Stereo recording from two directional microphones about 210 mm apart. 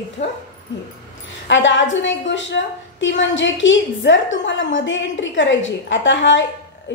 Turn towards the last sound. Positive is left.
turn(degrees=60)  # may be behind; listen again after turning